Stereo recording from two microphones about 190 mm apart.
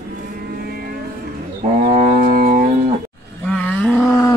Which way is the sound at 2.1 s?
45° right (ahead or behind).